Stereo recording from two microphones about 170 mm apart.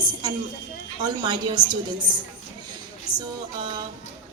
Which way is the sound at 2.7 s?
25° right (ahead or behind).